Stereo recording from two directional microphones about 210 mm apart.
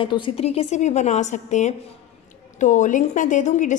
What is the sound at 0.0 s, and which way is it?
A woman's voice, 25° left (ahead or behind).